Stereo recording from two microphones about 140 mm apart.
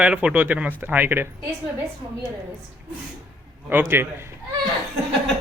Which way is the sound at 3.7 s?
15° right (ahead or behind).